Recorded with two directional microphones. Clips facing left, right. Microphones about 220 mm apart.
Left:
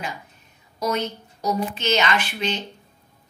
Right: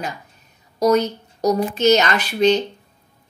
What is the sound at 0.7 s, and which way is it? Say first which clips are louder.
A woman's voice: right 9 dB; 40° right (ahead or behind).